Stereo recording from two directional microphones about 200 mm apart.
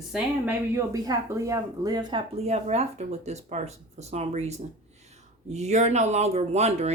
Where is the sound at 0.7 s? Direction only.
15° right (ahead or behind).